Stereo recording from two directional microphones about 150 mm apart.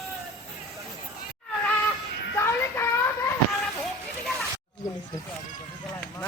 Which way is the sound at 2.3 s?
15° left (ahead or behind).